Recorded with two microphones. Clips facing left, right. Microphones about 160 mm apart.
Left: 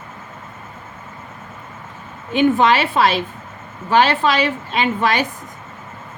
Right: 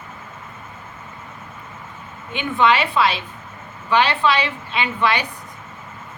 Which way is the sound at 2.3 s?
40° left (ahead or behind).